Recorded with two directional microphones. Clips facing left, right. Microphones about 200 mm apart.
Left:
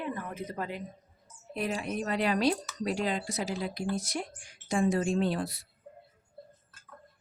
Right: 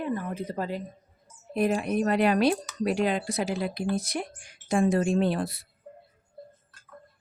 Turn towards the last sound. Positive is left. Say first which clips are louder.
# right 4 dB
turn(degrees=-55)  # may be behind; listen again after turning